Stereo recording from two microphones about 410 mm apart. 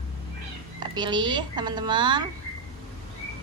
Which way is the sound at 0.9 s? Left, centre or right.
Centre.